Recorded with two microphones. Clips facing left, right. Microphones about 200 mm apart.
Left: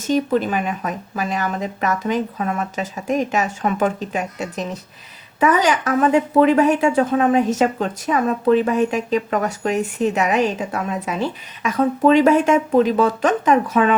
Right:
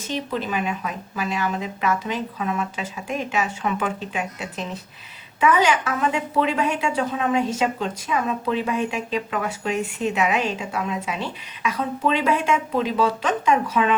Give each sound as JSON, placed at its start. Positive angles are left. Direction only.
{"t": 0.1, "sound": "speech", "side_deg": 45}